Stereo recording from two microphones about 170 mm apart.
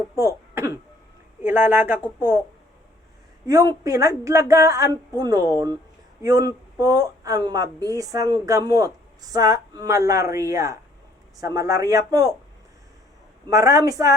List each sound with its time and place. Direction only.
0.2 s cough: 15° right (ahead or behind)
1.4 s speech: 10° right (ahead or behind)
3.4 s a woman's voice: 20° right (ahead or behind)
13.5 s a woman's voice: 20° right (ahead or behind)